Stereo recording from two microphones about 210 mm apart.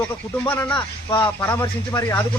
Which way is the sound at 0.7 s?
25° left (ahead or behind).